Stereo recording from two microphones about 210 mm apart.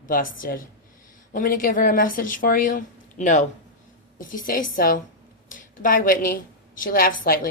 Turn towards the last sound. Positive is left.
turn(degrees=45)  # may be behind; listen again after turning